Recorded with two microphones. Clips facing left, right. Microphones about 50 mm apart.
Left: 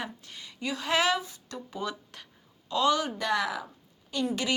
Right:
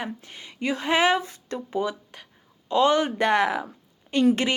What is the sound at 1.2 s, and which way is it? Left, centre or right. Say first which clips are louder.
Speech: right 7 dB; right.